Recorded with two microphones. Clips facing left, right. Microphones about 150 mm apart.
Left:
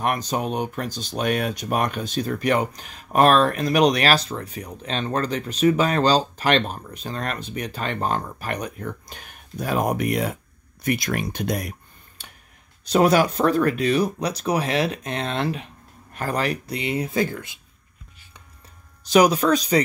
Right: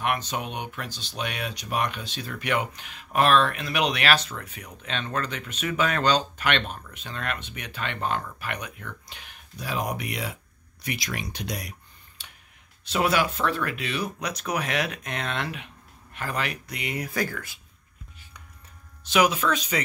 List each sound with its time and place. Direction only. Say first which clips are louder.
0.0 s speech: left 4 dB; 40° left (ahead or behind)
12.2 s tick-tock: left 4 dB; 45° left (ahead or behind)
12.8 s speech: left 7 dB; 40° left (ahead or behind); by 17.6 s 20° left (ahead or behind)
19.0 s speech: left 6 dB; 40° left (ahead or behind)